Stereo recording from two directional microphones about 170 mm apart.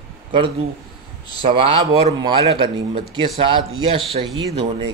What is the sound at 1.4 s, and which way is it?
A man's voice, 30° right (ahead or behind).